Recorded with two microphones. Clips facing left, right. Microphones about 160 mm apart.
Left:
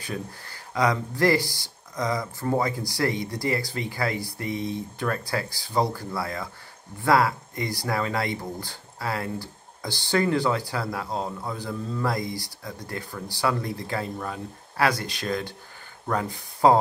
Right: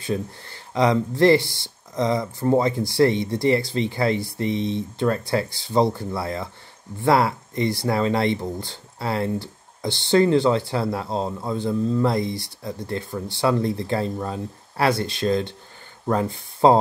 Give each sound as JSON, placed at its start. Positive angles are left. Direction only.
{"t": 0.0, "sound": "speech", "side_deg": -25}